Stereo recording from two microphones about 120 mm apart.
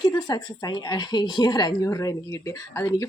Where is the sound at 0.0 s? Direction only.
35° left (ahead or behind).